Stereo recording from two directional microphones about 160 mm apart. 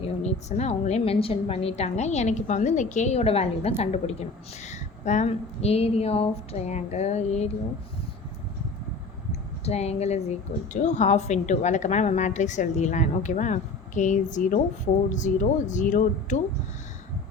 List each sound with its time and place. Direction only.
0.2 s a woman's voice: 45° left (ahead or behind)
9.6 s a woman's voice: 40° left (ahead or behind)